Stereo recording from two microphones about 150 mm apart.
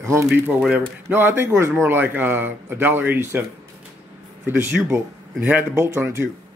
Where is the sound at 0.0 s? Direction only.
20° right (ahead or behind).